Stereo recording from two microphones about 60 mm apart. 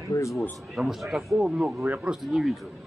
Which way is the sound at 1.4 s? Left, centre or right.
Centre.